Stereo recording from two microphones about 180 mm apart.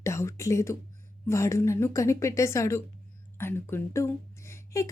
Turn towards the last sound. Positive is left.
turn(degrees=15)  # may be behind; listen again after turning